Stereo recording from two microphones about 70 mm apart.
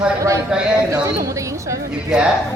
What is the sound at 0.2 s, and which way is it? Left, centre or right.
A woman's voice, right.